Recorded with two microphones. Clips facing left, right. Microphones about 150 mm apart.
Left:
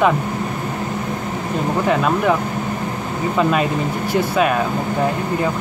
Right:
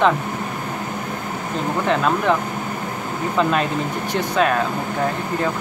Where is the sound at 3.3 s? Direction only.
5° left (ahead or behind).